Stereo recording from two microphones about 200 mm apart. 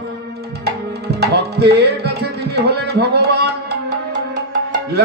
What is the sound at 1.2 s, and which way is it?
Music, 55° right (ahead or behind).